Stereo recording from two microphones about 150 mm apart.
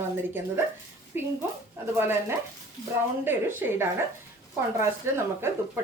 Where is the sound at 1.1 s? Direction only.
15° right (ahead or behind).